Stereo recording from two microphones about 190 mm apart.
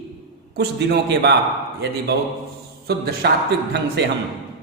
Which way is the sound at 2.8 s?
55° right (ahead or behind).